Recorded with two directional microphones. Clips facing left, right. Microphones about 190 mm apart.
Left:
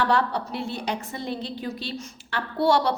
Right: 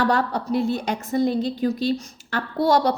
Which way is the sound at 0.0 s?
40° right (ahead or behind).